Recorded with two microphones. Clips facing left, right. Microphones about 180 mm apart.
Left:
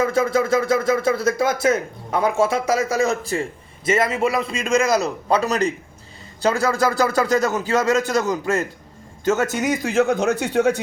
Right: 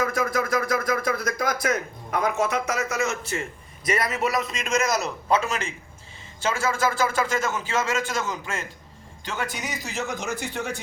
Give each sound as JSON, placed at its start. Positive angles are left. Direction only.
{"t": 0.0, "sound": "speech", "side_deg": 25}